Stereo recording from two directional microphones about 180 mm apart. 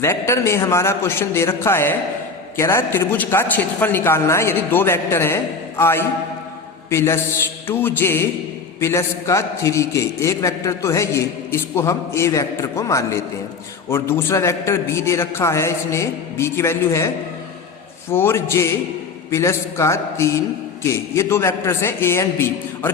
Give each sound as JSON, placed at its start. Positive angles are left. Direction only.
{"t": 0.0, "sound": "a man's voice", "side_deg": 15}
{"t": 18.1, "sound": "a man's voice", "side_deg": 15}